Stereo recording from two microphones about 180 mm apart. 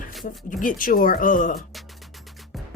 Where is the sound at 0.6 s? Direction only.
50° left (ahead or behind).